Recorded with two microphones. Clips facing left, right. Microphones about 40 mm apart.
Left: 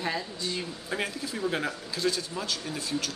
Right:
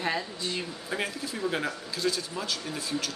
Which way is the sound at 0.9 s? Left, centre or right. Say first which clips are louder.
Even; centre.